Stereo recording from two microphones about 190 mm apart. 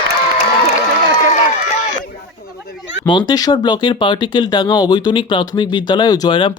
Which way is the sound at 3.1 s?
25° left (ahead or behind).